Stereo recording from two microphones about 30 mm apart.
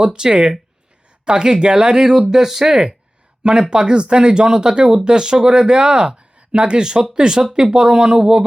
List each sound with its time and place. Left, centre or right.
0.0 s speech: right
3.7 s speech: right